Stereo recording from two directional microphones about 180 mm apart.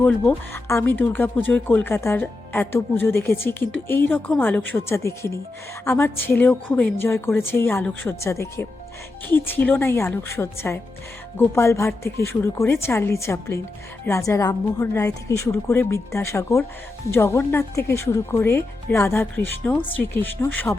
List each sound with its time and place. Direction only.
0.0 s speech: 15° left (ahead or behind)